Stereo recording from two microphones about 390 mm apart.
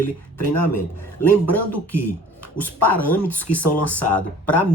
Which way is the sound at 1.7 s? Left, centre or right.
Left.